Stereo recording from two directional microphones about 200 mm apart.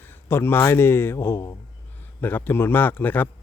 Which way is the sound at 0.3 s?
10° left (ahead or behind).